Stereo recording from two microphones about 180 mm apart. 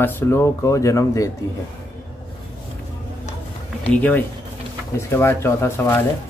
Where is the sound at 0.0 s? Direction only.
15° left (ahead or behind).